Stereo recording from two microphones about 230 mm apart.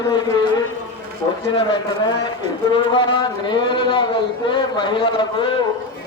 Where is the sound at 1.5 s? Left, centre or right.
Left.